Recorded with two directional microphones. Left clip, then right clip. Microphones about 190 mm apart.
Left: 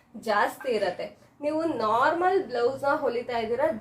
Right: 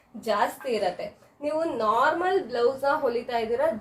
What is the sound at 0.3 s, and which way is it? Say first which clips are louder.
A woman's voice: even; 25° left (ahead or behind).